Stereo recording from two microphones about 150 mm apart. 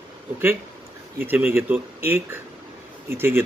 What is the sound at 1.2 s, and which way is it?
A man's voice, 15° right (ahead or behind).